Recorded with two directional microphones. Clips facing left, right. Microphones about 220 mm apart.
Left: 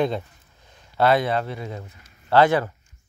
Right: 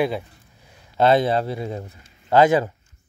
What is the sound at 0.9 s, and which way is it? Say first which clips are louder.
Speech: right 2 dB; 25° right (ahead or behind).